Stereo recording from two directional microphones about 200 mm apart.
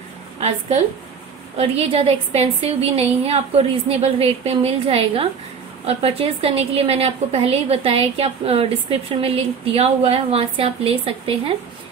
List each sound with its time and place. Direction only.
1.6 s a woman's voice: 30° right (ahead or behind)